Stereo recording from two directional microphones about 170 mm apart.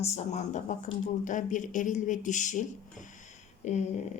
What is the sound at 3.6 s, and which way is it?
Speech, 40° left (ahead or behind).